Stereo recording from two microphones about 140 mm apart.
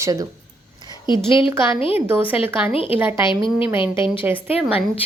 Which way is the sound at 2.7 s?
40° left (ahead or behind).